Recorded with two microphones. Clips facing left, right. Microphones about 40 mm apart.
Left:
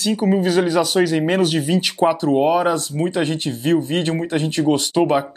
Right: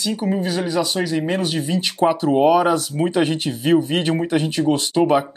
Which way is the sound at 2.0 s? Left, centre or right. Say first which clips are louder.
Right 2 dB; centre.